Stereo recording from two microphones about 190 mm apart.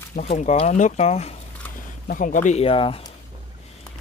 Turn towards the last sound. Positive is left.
turn(degrees=25)  # may be behind; listen again after turning